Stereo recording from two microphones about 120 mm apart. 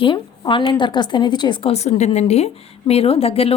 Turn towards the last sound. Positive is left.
turn(degrees=55)  # may be behind; listen again after turning